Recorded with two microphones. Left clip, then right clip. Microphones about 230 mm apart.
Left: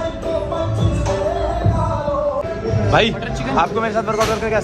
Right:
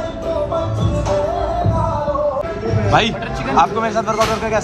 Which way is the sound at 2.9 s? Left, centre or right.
Centre.